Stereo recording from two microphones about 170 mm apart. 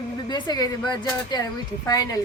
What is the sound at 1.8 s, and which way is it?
Speech, 20° left (ahead or behind).